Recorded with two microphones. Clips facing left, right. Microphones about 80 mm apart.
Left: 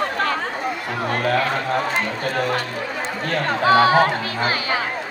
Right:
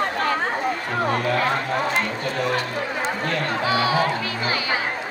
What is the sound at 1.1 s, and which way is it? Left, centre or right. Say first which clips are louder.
Speech: left 2 dB; left.